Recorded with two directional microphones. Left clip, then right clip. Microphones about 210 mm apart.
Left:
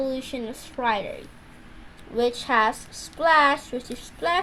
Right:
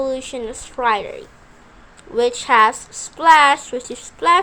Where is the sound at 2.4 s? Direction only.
10° right (ahead or behind).